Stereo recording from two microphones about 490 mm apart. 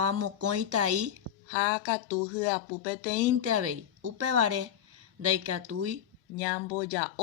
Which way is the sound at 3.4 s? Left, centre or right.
Right.